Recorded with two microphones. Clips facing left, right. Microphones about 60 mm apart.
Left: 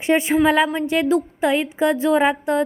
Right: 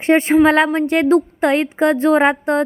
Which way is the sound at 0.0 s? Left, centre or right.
Right.